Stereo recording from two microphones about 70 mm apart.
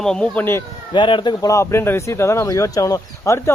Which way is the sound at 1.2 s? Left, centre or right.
Left.